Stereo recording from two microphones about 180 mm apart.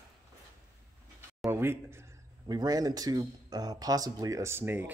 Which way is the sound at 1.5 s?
10° right (ahead or behind).